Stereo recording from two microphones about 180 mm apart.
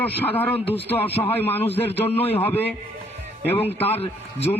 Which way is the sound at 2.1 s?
35° left (ahead or behind).